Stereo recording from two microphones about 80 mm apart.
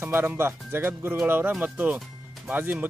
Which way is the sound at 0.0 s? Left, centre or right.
Right.